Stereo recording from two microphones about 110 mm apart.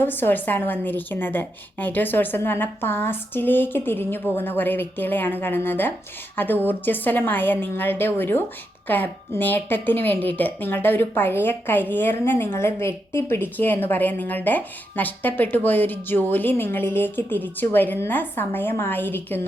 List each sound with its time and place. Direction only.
0.0 s a woman's voice: 20° left (ahead or behind)